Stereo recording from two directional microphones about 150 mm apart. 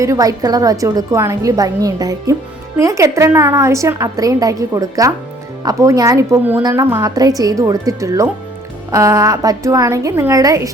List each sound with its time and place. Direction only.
0.0 s a woman's voice: 20° right (ahead or behind)